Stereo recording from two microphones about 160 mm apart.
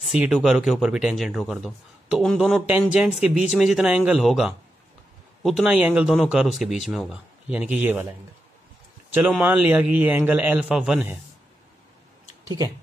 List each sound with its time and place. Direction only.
0.0 s speech: 5° right (ahead or behind)
9.3 s a man's voice: 10° right (ahead or behind)
12.4 s speech: 20° right (ahead or behind)